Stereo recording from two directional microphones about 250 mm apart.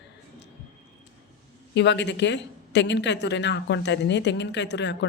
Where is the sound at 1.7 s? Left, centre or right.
Left.